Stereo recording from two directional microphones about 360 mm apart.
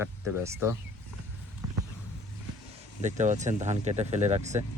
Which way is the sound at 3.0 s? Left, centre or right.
Centre.